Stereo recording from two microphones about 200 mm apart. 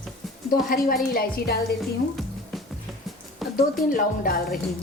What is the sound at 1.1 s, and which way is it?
Speech, 50° left (ahead or behind).